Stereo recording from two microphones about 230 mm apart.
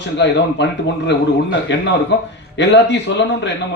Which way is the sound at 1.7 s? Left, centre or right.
Left.